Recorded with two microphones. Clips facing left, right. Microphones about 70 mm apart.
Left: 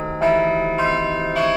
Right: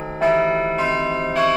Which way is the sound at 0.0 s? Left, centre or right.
Left.